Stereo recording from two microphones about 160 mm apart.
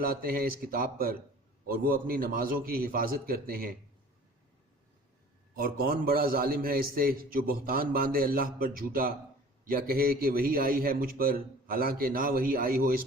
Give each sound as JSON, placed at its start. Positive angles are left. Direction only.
{"t": 0.0, "sound": "a man's voice", "side_deg": -65}
{"t": 5.5, "sound": "a man's voice", "side_deg": -65}